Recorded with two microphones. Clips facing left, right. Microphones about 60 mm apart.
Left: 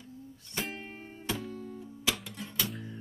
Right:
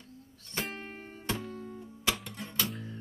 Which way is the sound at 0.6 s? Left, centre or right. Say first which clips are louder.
Even; centre.